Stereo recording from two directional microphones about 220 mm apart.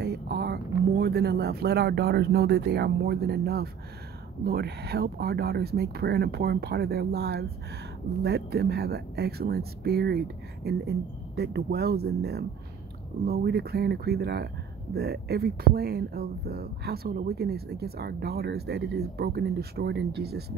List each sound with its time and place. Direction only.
0.0 s speech: 50° right (ahead or behind)